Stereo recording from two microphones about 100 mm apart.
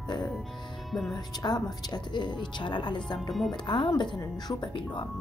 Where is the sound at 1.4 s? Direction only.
45° left (ahead or behind).